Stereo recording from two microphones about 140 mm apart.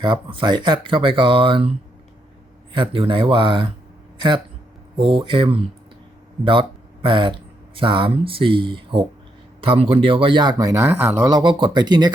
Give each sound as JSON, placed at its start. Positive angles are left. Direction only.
{"t": 0.0, "sound": "speech", "side_deg": -35}
{"t": 2.7, "sound": "speech", "side_deg": -40}
{"t": 4.9, "sound": "speech", "side_deg": -40}
{"t": 11.3, "sound": "speech", "side_deg": -30}